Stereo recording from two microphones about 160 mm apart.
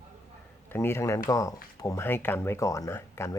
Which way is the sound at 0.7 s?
15° left (ahead or behind).